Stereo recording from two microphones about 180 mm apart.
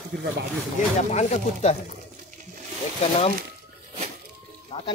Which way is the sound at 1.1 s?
40° left (ahead or behind).